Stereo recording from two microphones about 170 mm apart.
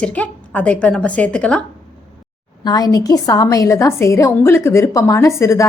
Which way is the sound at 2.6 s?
25° left (ahead or behind).